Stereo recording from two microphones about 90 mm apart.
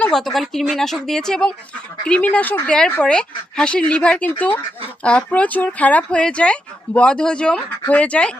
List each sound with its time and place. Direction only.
0.0 s speech: 5° left (ahead or behind)